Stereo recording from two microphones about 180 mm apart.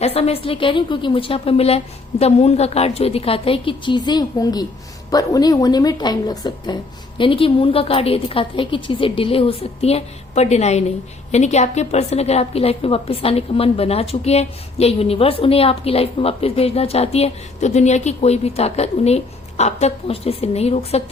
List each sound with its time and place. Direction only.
0.0 s a woman's voice: 35° left (ahead or behind)